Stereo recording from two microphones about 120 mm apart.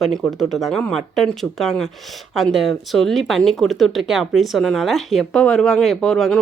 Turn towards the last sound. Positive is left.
turn(degrees=5)  # may be behind; listen again after turning